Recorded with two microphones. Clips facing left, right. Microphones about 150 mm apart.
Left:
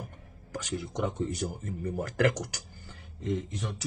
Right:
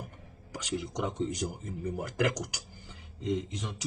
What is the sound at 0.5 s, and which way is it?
A man's voice, 15° right (ahead or behind).